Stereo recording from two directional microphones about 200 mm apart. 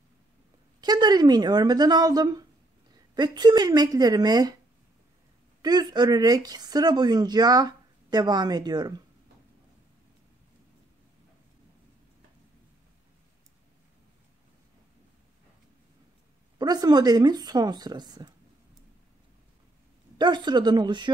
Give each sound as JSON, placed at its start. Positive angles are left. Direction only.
{"t": 0.7, "sound": "speech", "side_deg": -20}
{"t": 5.6, "sound": "speech", "side_deg": -20}
{"t": 16.5, "sound": "speech", "side_deg": -20}
{"t": 20.2, "sound": "speech", "side_deg": -20}